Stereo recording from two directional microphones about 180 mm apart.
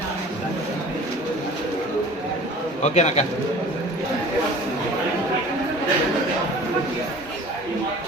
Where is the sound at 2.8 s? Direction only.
40° left (ahead or behind).